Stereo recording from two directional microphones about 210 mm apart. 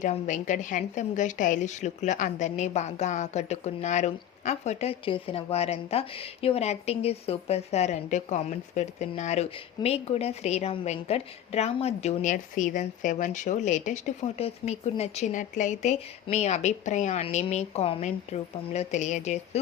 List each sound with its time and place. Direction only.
0.0 s a woman's voice: 35° left (ahead or behind)